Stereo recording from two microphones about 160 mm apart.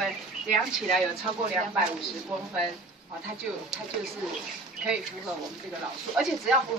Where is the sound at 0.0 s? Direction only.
Centre (ahead or behind).